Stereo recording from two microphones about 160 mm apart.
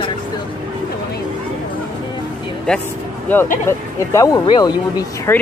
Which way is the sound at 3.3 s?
10° left (ahead or behind).